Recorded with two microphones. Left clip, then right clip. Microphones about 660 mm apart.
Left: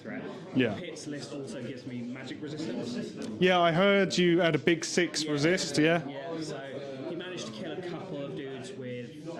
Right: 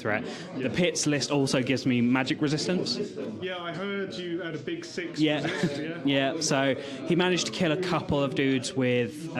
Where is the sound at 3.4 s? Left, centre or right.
Left.